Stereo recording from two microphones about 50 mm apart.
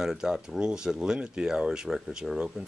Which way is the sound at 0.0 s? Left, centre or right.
Centre.